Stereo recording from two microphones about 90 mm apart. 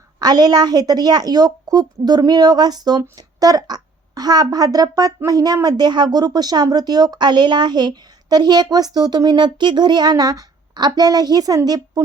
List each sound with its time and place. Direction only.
0.2 s speech: 50° right (ahead or behind)